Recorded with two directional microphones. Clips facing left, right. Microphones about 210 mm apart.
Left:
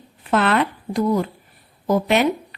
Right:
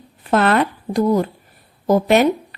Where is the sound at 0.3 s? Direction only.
40° right (ahead or behind).